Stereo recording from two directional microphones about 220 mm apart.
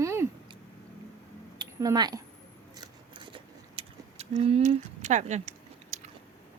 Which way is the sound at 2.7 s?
20° right (ahead or behind).